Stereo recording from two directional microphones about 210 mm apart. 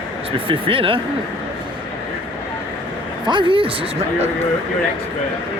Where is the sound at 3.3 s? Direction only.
25° right (ahead or behind).